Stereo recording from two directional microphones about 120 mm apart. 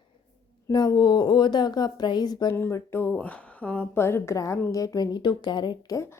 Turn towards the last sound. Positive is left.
turn(degrees=30)  # may be behind; listen again after turning